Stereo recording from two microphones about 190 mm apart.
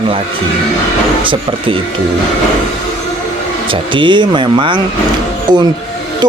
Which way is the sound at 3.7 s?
25° right (ahead or behind).